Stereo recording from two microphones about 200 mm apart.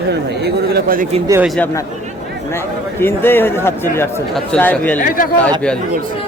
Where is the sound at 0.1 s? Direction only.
55° right (ahead or behind).